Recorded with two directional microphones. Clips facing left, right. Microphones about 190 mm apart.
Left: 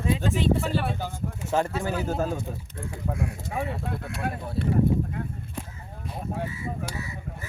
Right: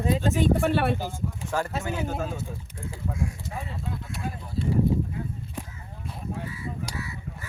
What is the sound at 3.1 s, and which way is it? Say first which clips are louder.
Speech: left 5 dB; 65° left (ahead or behind).